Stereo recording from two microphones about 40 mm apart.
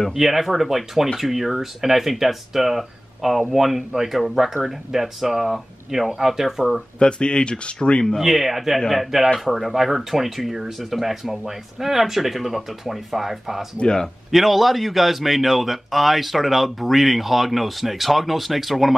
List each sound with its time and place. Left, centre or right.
0.1 s speech: centre
7.0 s speech: left
8.2 s speech: centre
13.7 s speech: left
14.3 s speech: centre